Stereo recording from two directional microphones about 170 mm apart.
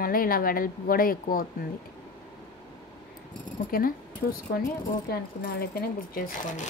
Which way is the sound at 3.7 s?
60° left (ahead or behind).